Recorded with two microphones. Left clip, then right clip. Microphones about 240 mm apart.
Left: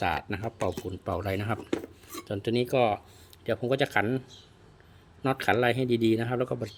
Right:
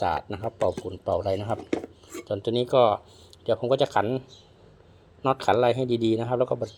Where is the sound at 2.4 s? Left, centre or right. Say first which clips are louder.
Right 5 dB; centre.